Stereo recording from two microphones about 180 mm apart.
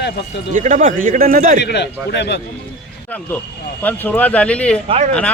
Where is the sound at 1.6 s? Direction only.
70° left (ahead or behind).